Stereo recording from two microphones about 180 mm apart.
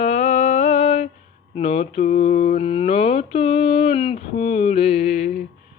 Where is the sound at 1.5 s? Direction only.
35° left (ahead or behind).